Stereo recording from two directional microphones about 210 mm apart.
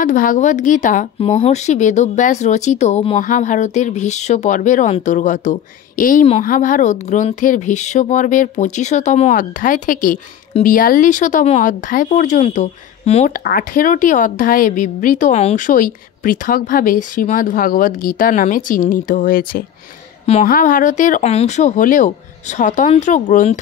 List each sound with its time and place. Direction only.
0.0 s speech: 40° left (ahead or behind)
13.4 s speech: 45° left (ahead or behind)